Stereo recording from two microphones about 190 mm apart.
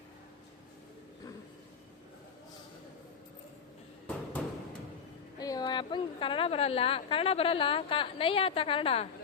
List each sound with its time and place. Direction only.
4.4 s music: centre (ahead or behind)
5.4 s a woman's voice: 20° left (ahead or behind)